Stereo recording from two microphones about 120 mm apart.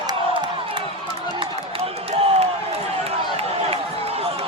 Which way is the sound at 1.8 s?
50° right (ahead or behind).